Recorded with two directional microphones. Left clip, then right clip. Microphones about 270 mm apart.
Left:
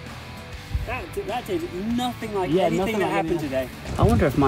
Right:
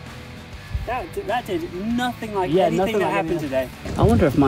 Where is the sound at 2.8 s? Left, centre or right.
Centre.